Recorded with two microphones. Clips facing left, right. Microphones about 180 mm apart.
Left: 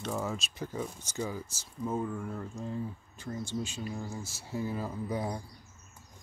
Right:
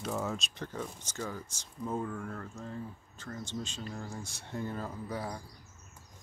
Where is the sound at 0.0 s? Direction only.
Centre (ahead or behind); by 5.4 s 20° left (ahead or behind).